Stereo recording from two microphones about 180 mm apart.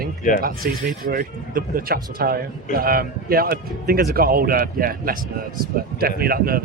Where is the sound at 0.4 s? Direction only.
55° right (ahead or behind).